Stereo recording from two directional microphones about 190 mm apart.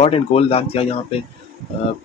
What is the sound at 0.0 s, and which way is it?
Speech, 30° left (ahead or behind).